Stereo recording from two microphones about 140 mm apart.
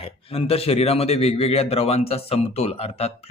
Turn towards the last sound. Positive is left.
turn(degrees=45)  # may be behind; listen again after turning